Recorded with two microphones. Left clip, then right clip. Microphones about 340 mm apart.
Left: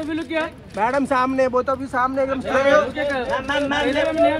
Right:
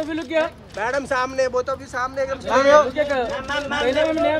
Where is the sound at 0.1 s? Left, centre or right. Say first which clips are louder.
Right 2 dB; right.